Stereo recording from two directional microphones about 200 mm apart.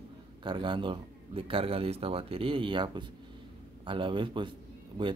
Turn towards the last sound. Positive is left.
turn(degrees=-25)  # may be behind; listen again after turning